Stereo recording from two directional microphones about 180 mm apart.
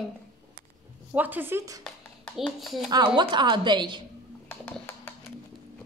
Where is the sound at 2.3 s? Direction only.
Centre (ahead or behind).